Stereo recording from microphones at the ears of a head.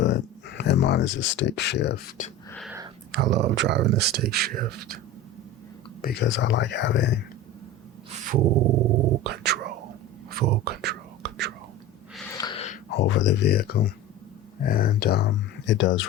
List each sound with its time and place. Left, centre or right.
0.0 s speech: left
3.1 s speech: right
6.0 s speech: left
8.1 s dog: right
10.3 s whispering: right
12.5 s speech: left